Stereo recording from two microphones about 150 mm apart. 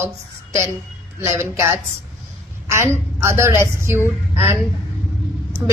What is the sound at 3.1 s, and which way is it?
Speech, 20° right (ahead or behind).